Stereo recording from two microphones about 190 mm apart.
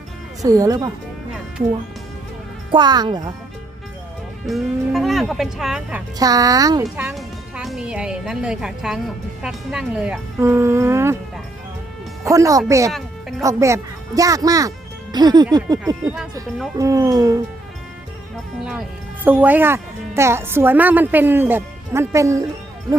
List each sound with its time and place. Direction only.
0.4 s speech: 20° right (ahead or behind)
2.7 s speech: 20° right (ahead or behind)
4.4 s speech: centre (ahead or behind)
6.1 s speech: 20° right (ahead or behind)
6.8 s speech: 5° right (ahead or behind)
12.2 s speech: 15° right (ahead or behind)
19.2 s speech: 10° right (ahead or behind)